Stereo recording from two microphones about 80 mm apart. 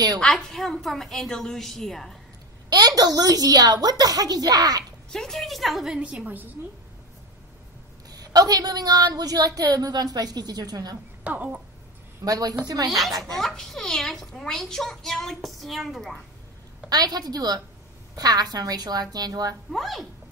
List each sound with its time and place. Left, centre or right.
0.2 s a child's voice: centre
3.0 s a woman's voice: right
5.1 s a child's voice: centre
5.9 s a woman's voice: centre
8.1 s a woman's voice: right
11.2 s a woman's voice: centre
12.3 s a woman's voice: right
13.2 s a child's voice: centre
16.9 s a woman's voice: right
19.7 s a child's voice: centre